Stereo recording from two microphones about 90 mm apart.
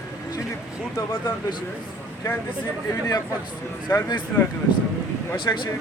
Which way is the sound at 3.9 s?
30° left (ahead or behind).